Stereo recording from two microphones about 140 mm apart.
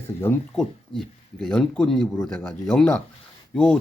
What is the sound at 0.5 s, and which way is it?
Speech, 5° left (ahead or behind).